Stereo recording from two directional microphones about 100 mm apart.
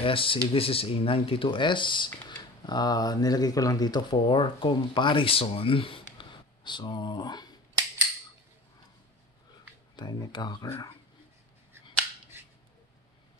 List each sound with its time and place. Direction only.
0.0 s speech: 65° left (ahead or behind); by 7.5 s 45° left (ahead or behind)
9.9 s speech: 45° left (ahead or behind)